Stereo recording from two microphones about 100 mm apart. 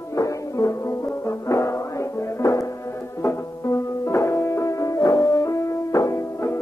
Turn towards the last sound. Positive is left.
turn(degrees=30)  # may be behind; listen again after turning